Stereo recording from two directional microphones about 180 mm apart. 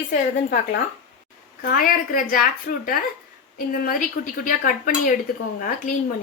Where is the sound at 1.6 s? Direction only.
55° left (ahead or behind).